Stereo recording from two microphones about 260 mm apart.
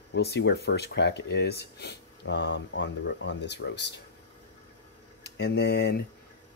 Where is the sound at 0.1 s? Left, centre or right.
Left.